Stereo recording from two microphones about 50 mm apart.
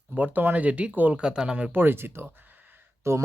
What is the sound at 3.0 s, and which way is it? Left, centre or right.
Speech, right.